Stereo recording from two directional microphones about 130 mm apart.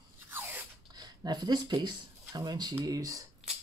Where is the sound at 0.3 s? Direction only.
15° right (ahead or behind).